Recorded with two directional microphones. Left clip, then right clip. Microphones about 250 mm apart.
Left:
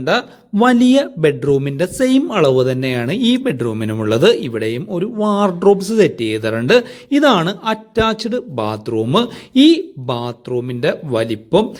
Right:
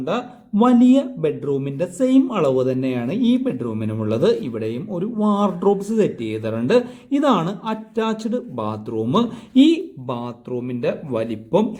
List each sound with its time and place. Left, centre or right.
0.0 s speech: centre